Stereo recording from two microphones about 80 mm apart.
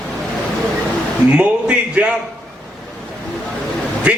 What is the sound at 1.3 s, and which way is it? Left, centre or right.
Speech, centre.